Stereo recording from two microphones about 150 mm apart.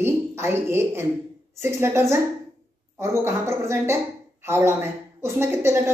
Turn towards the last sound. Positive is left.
turn(degrees=-15)  # may be behind; listen again after turning